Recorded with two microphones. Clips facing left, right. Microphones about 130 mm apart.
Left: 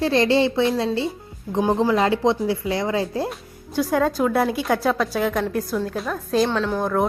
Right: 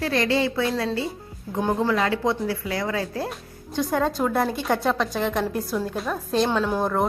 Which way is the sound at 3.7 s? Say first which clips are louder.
Left 3 dB; 5° left (ahead or behind).